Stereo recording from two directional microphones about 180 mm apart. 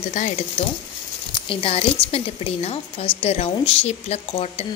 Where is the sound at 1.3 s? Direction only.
30° left (ahead or behind).